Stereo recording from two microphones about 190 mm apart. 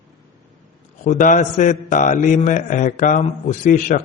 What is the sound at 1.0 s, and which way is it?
A man's voice, 40° left (ahead or behind).